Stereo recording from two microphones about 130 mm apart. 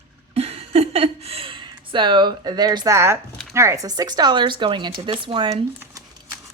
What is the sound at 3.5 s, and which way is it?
Speech, 20° right (ahead or behind).